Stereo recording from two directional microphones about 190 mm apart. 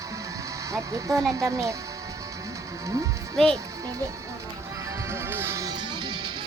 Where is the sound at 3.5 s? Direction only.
15° right (ahead or behind).